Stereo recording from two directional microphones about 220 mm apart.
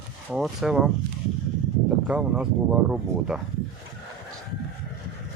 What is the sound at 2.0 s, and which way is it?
Speech, 5° right (ahead or behind).